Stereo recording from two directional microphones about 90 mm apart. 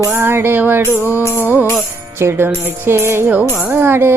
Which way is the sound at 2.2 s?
25° right (ahead or behind).